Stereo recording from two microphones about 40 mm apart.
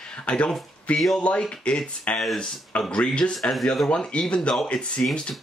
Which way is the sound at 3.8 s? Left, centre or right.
Centre.